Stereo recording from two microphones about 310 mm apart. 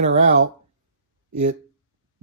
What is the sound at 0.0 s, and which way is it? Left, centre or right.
Speech, right.